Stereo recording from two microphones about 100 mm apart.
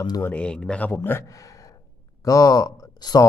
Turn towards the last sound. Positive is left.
turn(degrees=40)  # may be behind; listen again after turning